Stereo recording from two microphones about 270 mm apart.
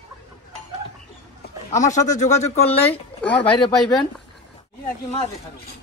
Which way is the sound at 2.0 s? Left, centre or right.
Left.